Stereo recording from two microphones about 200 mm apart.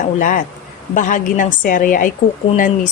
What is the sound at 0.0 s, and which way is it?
Speech, 40° left (ahead or behind).